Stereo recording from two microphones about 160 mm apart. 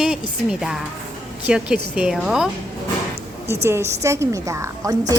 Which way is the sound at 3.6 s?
15° right (ahead or behind).